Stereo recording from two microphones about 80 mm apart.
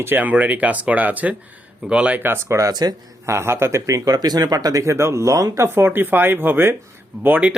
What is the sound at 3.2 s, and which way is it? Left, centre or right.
Speech, right.